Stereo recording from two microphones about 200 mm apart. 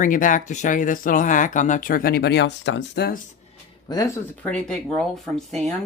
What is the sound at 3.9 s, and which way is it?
Speech, 15° left (ahead or behind).